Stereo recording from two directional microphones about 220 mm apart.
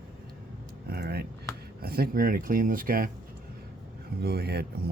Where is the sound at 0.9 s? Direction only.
45° right (ahead or behind).